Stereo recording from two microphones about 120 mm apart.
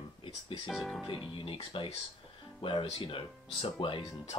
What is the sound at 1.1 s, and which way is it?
Speech, 45° left (ahead or behind).